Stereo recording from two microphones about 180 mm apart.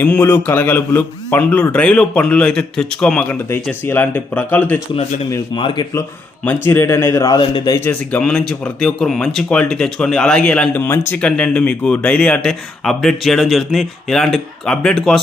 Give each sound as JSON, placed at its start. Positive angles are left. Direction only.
{"t": 0.0, "sound": "a man's voice", "side_deg": 10}
{"t": 5.5, "sound": "speech", "side_deg": 30}
{"t": 6.4, "sound": "a man's voice", "side_deg": 10}
{"t": 7.9, "sound": "speech", "side_deg": 5}